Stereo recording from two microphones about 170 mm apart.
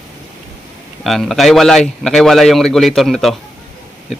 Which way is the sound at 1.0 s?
Centre (ahead or behind).